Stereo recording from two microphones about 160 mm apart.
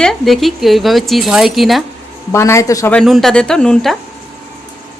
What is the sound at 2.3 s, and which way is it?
Speech, 20° left (ahead or behind).